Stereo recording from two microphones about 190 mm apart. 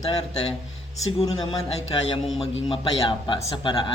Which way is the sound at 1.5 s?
20° left (ahead or behind).